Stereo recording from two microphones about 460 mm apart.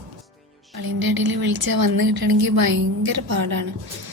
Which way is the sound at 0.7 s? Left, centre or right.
Right.